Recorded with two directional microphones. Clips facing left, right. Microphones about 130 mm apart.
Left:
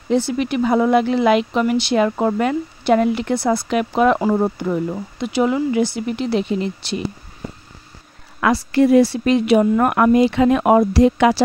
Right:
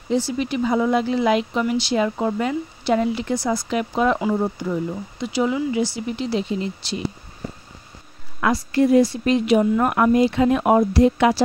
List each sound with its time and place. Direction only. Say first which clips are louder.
0.1 s speech: left 3 dB; 60° left (ahead or behind)
8.4 s speech: left 3 dB; 85° left